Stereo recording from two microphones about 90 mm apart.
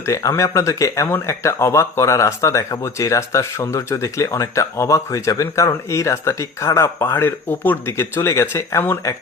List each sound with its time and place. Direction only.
0.0 s speech: 35° left (ahead or behind)